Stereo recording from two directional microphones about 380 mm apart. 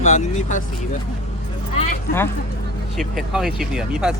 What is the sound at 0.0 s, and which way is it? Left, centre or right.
Speech, centre.